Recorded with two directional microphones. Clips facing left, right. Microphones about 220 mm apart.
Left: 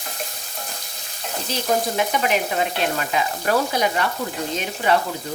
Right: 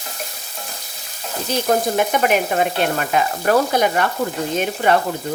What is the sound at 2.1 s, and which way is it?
Frying, 50° right (ahead or behind).